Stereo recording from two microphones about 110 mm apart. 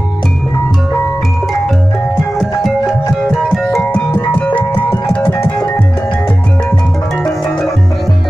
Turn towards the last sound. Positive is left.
turn(degrees=5)  # may be behind; listen again after turning